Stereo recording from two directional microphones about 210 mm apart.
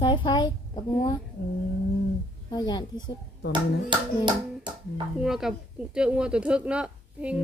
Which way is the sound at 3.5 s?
20° right (ahead or behind).